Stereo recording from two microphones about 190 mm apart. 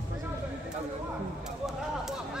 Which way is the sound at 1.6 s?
Centre (ahead or behind).